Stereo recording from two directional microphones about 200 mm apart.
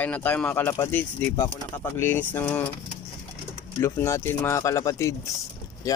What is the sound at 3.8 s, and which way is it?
Speech, 15° left (ahead or behind).